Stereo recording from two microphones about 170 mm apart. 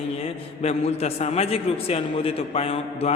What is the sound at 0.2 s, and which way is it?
A man's voice, 35° left (ahead or behind).